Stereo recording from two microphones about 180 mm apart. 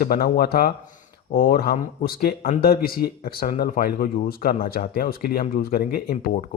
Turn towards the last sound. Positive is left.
turn(degrees=55)  # may be behind; listen again after turning